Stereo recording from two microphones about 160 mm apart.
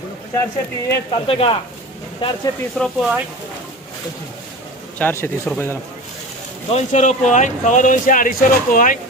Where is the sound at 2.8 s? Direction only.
5° left (ahead or behind).